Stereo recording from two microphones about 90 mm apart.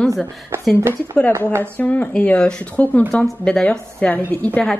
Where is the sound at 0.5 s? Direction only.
25° right (ahead or behind).